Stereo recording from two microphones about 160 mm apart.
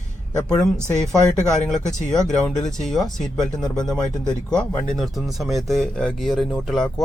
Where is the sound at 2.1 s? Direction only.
5° left (ahead or behind).